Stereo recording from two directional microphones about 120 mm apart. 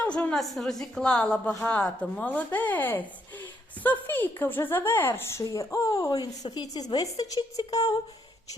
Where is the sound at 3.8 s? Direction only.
15° left (ahead or behind); by 6.3 s 30° left (ahead or behind).